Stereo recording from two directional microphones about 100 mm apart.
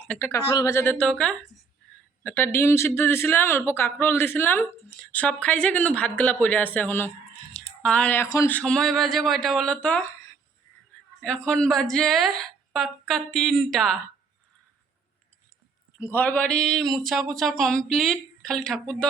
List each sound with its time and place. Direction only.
0.3 s speech: 35° left (ahead or behind)
0.9 s a woman's voice: 10° left (ahead or behind)
2.2 s a woman's voice: 20° left (ahead or behind)
7.5 s a sound: 10° left (ahead or behind)
8.4 s speech: 10° left (ahead or behind)
11.2 s speech: 10° left (ahead or behind)
16.0 s speech: 25° left (ahead or behind)